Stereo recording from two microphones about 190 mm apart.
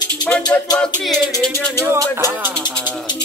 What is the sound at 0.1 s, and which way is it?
Music, 5° left (ahead or behind).